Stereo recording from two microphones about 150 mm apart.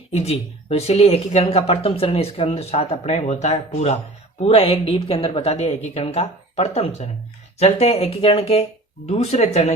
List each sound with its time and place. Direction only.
0.1 s speech: 45° left (ahead or behind)